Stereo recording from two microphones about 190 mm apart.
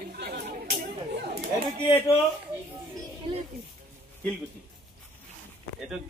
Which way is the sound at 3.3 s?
25° right (ahead or behind).